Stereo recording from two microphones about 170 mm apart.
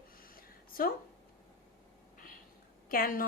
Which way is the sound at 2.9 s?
55° left (ahead or behind).